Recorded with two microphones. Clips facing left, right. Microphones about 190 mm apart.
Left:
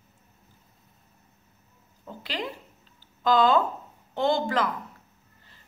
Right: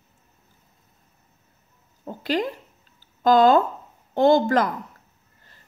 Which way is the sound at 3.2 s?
45° right (ahead or behind).